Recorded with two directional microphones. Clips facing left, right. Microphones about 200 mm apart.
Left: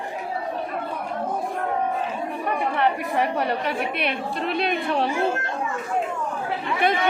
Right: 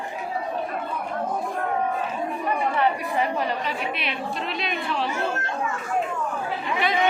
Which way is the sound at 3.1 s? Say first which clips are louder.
Left 2 dB; 60° left (ahead or behind).